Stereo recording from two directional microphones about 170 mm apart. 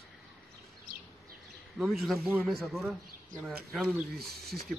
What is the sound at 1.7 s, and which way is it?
Speech, centre (ahead or behind).